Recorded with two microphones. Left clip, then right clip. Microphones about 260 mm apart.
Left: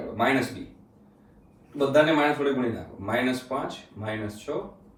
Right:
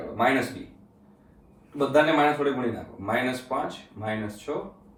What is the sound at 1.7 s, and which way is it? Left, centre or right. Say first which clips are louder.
A man's voice: even; centre.